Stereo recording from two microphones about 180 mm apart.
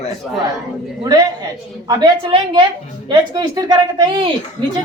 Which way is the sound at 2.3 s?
30° right (ahead or behind).